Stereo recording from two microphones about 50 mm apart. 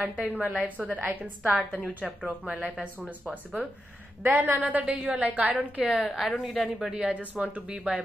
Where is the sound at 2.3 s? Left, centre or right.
Right.